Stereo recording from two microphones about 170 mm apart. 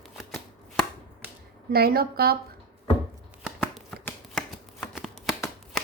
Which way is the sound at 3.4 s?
Centre (ahead or behind).